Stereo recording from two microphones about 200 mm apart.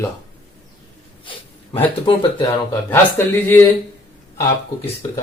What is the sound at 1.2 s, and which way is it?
Speech, 25° left (ahead or behind).